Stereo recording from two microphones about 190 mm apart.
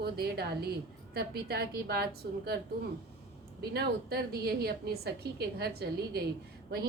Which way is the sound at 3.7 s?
55° right (ahead or behind).